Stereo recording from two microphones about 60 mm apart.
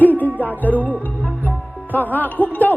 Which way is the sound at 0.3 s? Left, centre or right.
Right.